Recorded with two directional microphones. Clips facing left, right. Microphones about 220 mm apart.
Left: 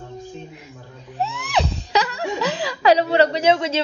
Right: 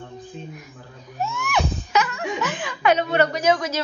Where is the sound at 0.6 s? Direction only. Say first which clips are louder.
Left 1 dB; 30° left (ahead or behind).